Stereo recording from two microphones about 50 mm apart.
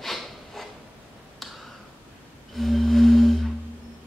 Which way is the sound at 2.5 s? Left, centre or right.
Centre.